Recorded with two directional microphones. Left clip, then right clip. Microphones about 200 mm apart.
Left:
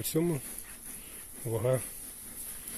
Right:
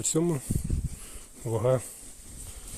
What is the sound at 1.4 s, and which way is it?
Speech, 25° right (ahead or behind).